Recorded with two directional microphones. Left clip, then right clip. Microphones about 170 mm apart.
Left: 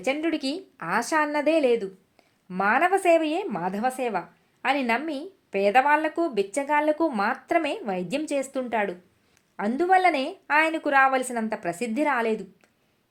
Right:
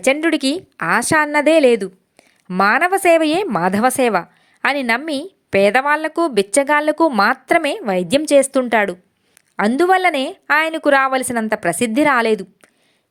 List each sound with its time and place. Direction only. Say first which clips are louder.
0.0 s a woman's voice: right 10 dB; 45° right (ahead or behind)
7.1 s a woman's voice: right 10 dB; 40° right (ahead or behind)